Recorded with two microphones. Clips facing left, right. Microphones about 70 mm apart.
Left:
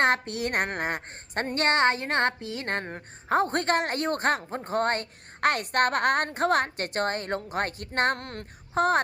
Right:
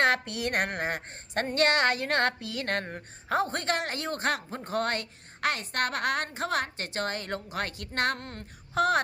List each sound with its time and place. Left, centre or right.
0.0 s a woman's voice: left
3.4 s speech: left
8.2 s music: left
8.7 s speech: left